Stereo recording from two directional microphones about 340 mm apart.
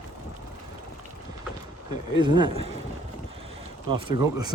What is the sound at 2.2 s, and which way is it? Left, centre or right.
Speech, centre.